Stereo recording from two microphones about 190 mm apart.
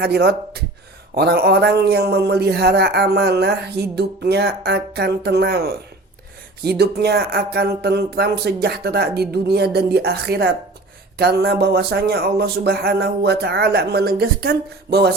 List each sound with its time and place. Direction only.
0.0 s a man's voice: 55° right (ahead or behind)